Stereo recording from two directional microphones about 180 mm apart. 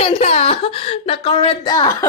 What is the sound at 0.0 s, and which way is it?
Speech, 35° left (ahead or behind).